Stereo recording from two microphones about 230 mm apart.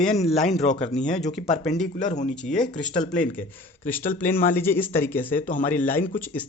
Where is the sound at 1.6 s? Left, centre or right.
Centre.